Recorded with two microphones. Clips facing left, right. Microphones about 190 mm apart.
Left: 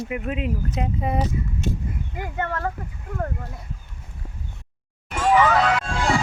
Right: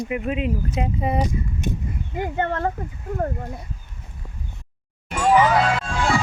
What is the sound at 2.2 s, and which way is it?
Speech, 25° right (ahead or behind).